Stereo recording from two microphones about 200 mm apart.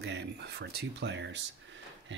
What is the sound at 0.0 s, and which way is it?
Speech, 55° right (ahead or behind).